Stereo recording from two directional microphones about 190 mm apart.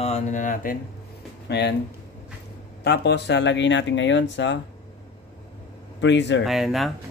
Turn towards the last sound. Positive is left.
turn(degrees=0)  # may be behind; listen again after turning